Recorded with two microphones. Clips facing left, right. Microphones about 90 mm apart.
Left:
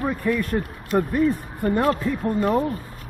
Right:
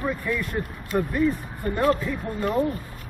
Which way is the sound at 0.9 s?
30° left (ahead or behind).